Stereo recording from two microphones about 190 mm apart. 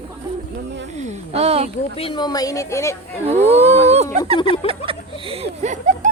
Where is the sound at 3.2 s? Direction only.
35° right (ahead or behind).